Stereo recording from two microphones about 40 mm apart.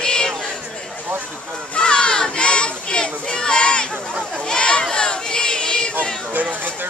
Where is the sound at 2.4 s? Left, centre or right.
Left.